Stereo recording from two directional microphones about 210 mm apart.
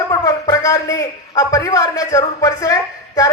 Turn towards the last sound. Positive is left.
turn(degrees=15)  # may be behind; listen again after turning